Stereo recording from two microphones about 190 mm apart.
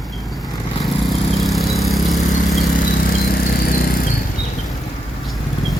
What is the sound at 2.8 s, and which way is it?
Vehicle, 45° left (ahead or behind).